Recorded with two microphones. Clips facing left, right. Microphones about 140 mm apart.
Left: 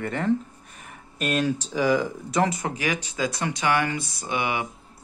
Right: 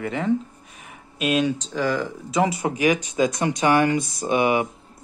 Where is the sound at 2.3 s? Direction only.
5° right (ahead or behind).